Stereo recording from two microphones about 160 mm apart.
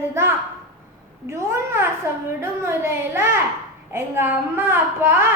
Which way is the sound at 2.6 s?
15° right (ahead or behind).